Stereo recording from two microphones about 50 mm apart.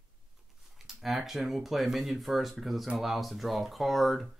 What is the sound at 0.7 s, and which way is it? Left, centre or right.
Speech, centre.